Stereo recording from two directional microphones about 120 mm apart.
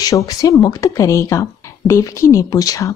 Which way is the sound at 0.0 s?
30° left (ahead or behind).